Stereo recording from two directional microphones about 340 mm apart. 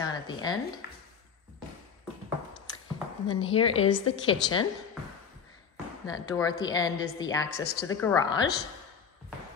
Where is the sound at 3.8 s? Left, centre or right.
Left.